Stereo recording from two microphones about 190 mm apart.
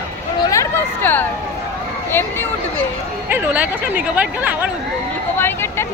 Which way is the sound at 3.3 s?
10° right (ahead or behind).